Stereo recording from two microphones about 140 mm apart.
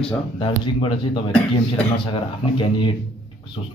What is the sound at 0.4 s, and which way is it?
Speech, 40° left (ahead or behind).